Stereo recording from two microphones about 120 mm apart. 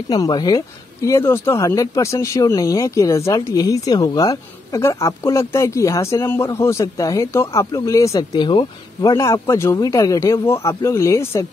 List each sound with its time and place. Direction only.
0.1 s speech: 35° left (ahead or behind)
9.0 s speech: 30° left (ahead or behind)